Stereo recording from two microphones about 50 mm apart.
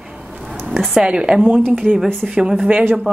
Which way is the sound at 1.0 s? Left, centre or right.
Centre.